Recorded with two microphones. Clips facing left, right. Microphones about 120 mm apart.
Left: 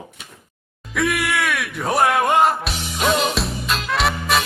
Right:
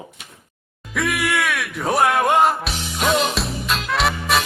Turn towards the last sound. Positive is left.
turn(degrees=0)  # may be behind; listen again after turning